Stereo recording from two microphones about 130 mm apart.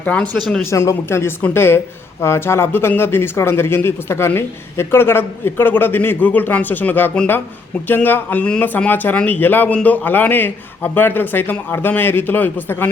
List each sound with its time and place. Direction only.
0.0 s speech: 10° left (ahead or behind)
0.7 s speech: 20° left (ahead or behind)